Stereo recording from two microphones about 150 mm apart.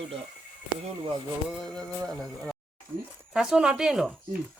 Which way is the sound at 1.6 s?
5° left (ahead or behind).